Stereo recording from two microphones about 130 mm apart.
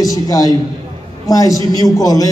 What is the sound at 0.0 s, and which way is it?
Speech, 25° left (ahead or behind).